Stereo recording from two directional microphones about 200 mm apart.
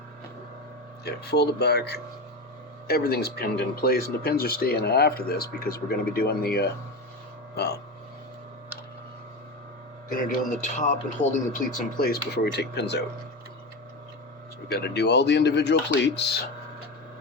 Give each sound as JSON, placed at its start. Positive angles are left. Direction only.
{"t": 1.0, "sound": "speech", "side_deg": 55}
{"t": 10.8, "sound": "speech", "side_deg": 40}
{"t": 14.8, "sound": "speech", "side_deg": 55}